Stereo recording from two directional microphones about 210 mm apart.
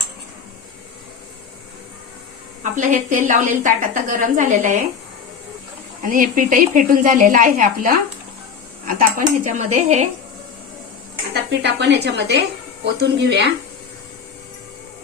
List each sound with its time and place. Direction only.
2.7 s a woman's voice: 35° right (ahead or behind)
6.0 s a woman's voice: 40° right (ahead or behind)
11.6 s a woman's voice: 55° right (ahead or behind)